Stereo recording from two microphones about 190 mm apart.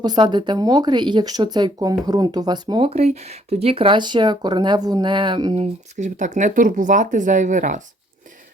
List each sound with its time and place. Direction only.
0.0 s speech: 20° right (ahead or behind); by 7.8 s 40° right (ahead or behind)